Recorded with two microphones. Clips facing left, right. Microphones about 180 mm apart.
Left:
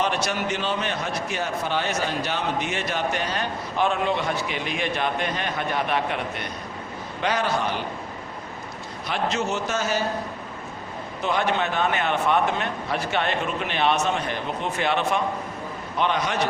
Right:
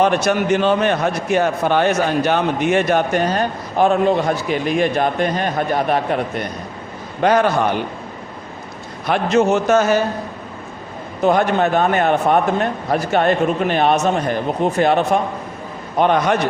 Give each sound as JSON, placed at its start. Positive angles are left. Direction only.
{"t": 0.0, "sound": "a man's voice", "side_deg": -50}
{"t": 9.0, "sound": "a man's voice", "side_deg": -55}
{"t": 11.2, "sound": "a man's voice", "side_deg": -45}